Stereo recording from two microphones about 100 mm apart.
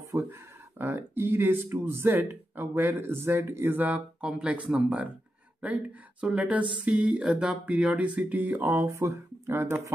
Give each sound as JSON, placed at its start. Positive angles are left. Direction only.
{"t": 0.1, "sound": "speech", "side_deg": -20}
{"t": 6.2, "sound": "a sound", "side_deg": -15}
{"t": 8.8, "sound": "speech", "side_deg": -30}